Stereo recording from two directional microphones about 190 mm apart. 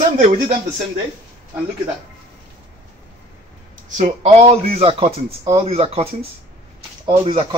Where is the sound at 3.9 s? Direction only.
35° right (ahead or behind).